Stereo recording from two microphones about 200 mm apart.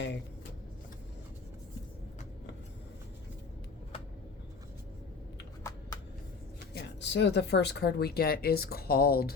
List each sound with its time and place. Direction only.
5.7 s shuffling cards: 15° left (ahead or behind)
6.7 s speech: 60° left (ahead or behind)